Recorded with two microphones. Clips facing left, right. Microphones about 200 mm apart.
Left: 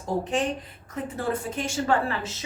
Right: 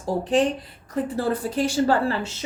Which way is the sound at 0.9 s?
35° right (ahead or behind).